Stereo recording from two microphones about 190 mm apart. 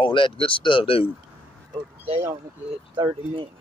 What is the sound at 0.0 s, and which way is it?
Speech, 25° left (ahead or behind).